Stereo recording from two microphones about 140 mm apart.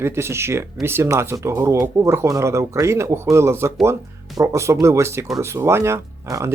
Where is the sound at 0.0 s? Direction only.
20° right (ahead or behind).